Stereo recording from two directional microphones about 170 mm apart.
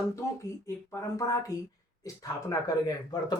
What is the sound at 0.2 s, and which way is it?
Speech, 20° left (ahead or behind).